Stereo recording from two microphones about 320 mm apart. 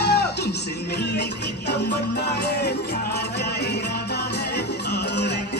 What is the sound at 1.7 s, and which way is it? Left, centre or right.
Music, left.